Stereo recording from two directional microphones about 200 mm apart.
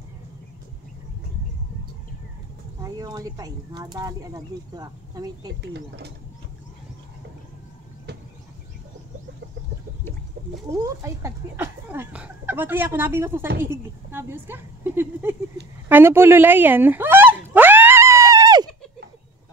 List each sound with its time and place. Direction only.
2.8 s speech: 20° right (ahead or behind)
5.6 s speech: 55° right (ahead or behind)
10.8 s speech: 15° right (ahead or behind)
15.9 s a sound: 10° right (ahead or behind)